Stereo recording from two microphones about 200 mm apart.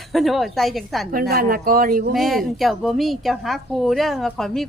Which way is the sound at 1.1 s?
45° right (ahead or behind).